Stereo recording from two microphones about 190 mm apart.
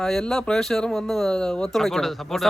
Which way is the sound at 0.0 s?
Centre (ahead or behind).